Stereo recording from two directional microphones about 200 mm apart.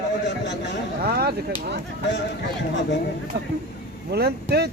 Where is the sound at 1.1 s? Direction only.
50° right (ahead or behind).